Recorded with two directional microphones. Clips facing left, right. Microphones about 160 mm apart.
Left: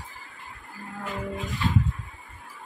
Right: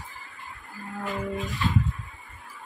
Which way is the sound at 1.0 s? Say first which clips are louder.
Right 2 dB; centre (ahead or behind).